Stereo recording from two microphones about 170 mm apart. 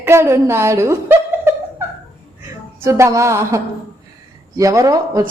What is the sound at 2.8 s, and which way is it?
A woman's voice, 15° right (ahead or behind).